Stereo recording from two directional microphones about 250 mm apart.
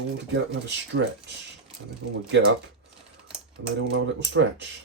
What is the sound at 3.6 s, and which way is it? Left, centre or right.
Speech, right.